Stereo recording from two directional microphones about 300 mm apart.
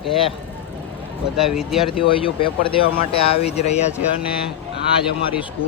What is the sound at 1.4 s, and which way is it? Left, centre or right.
Speech, centre.